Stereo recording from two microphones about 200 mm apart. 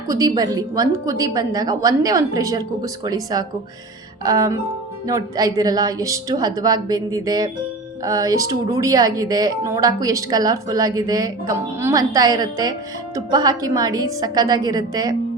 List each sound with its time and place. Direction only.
0.1 s a woman's voice: 15° right (ahead or behind)